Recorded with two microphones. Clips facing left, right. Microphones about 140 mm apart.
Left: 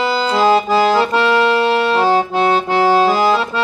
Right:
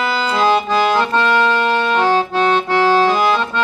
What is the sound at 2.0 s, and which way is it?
Accordion, 10° left (ahead or behind).